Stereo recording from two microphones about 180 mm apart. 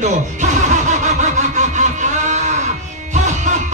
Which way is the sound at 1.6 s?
45° right (ahead or behind).